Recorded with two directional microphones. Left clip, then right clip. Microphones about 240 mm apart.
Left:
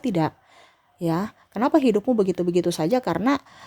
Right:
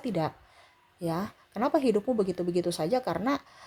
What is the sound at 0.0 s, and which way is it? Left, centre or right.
A woman's voice, left.